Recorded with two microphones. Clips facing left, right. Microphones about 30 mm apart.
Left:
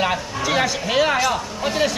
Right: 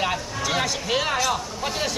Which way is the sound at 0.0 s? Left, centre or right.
Centre.